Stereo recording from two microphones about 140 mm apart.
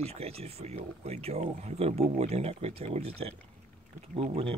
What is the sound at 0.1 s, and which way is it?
Speech, 45° right (ahead or behind).